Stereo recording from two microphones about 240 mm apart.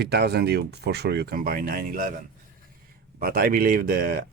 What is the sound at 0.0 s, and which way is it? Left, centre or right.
Speech, right.